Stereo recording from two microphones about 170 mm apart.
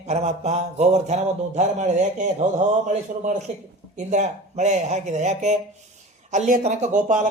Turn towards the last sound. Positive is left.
turn(degrees=-50)  # may be behind; listen again after turning